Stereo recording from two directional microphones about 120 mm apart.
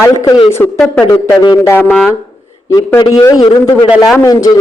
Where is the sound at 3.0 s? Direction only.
30° left (ahead or behind).